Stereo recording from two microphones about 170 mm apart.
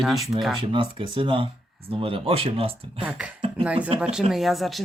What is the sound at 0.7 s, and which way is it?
Speech, 30° right (ahead or behind).